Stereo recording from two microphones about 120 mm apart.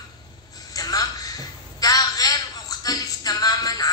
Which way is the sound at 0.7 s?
30° left (ahead or behind).